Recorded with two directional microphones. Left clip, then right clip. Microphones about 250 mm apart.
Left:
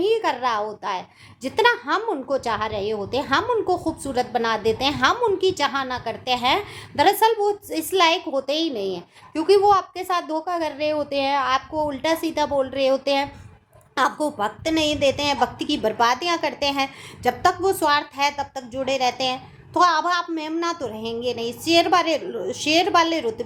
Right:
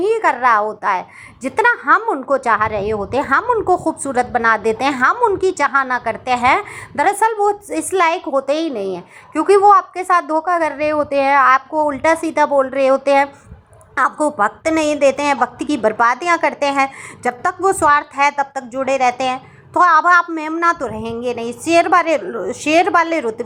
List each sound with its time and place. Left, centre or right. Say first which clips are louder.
0.3 s a woman's voice: right 9 dB; centre
8.9 s speech: right 5 dB; right
9.5 s a woman's voice: right 6 dB; centre